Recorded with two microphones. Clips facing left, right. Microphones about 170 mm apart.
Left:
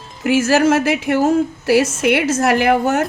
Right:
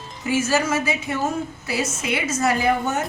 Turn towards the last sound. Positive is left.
turn(degrees=90)